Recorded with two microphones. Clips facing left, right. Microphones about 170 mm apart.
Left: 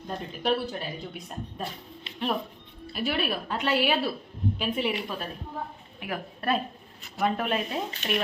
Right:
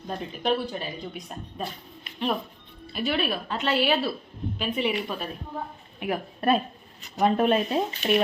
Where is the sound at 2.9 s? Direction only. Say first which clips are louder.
Right 2 dB; 5° left (ahead or behind).